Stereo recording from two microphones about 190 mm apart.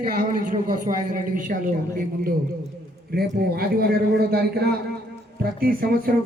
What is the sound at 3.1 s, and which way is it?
A man's voice, 55° right (ahead or behind).